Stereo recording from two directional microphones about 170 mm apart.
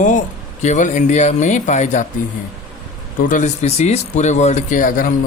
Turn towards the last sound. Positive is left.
turn(degrees=50)  # may be behind; listen again after turning